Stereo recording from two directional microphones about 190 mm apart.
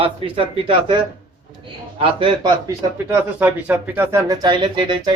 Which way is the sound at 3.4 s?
5° right (ahead or behind).